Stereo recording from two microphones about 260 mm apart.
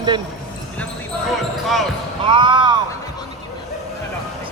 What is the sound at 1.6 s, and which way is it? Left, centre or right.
Speech, centre.